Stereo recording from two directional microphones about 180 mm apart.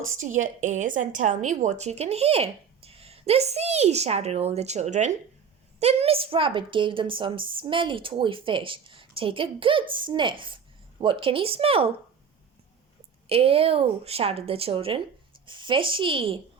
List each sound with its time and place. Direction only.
0.2 s a woman's voice: 45° right (ahead or behind)
13.2 s a woman's voice: 30° right (ahead or behind)